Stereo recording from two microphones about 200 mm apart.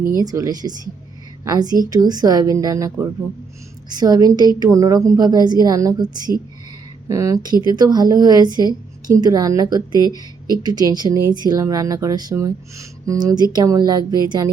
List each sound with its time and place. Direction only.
0.2 s a woman's voice: 20° right (ahead or behind)